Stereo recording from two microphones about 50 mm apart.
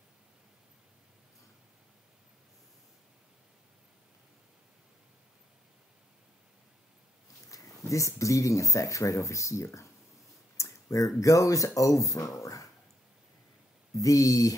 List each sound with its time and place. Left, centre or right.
7.4 s speech: left
10.6 s a sound: left
11.1 s speech: left
14.0 s speech: left